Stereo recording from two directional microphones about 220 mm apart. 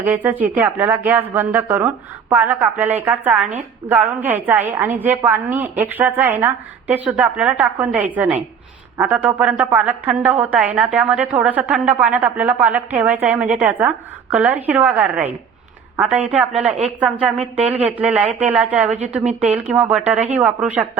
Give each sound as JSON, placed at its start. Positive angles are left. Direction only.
{"t": 0.0, "sound": "a woman's voice", "side_deg": -10}
{"t": 18.9, "sound": "a woman's voice", "side_deg": -30}
{"t": 19.2, "sound": "a woman's voice", "side_deg": -5}